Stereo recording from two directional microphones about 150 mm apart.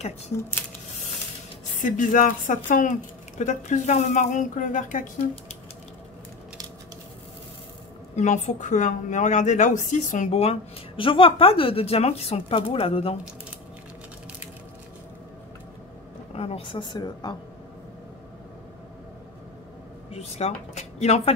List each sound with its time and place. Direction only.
1.8 s speech: 60° left (ahead or behind)
8.2 s a woman's voice: 50° left (ahead or behind)
16.3 s a woman's voice: 40° left (ahead or behind)
20.1 s speech: 45° left (ahead or behind)